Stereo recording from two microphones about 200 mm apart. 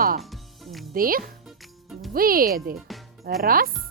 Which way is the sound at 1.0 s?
45° right (ahead or behind).